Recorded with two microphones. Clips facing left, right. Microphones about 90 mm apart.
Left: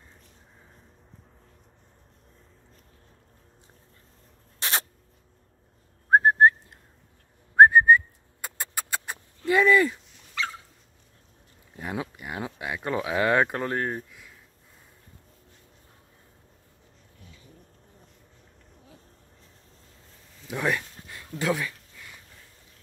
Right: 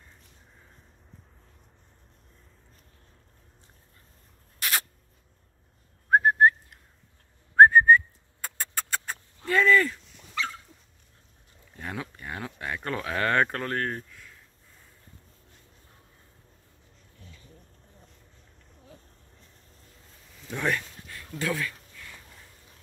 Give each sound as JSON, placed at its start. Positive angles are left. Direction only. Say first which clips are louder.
{"t": 4.6, "sound": "rodents", "louder": "left 1 dB", "side_deg": 30}
{"t": 6.0, "sound": "whistling", "louder": "left 2 dB", "side_deg": 30}
{"t": 7.5, "sound": "whistling", "louder": "even", "side_deg": 10}
{"t": 9.5, "sound": "speech", "louder": "left 2 dB", "side_deg": 15}
{"t": 11.7, "sound": "speech", "louder": "left 3 dB", "side_deg": 15}
{"t": 20.4, "sound": "a sound", "louder": "left 1 dB", "side_deg": 10}